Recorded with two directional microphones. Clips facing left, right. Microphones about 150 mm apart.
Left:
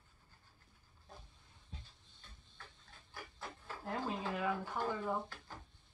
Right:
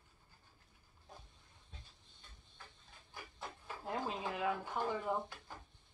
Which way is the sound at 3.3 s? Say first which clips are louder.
Right 1 dB; 15° right (ahead or behind).